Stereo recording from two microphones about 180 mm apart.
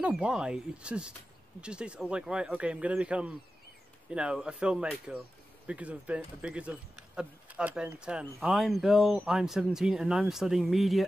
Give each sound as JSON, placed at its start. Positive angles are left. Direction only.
{"t": 0.0, "sound": "speech", "side_deg": -5}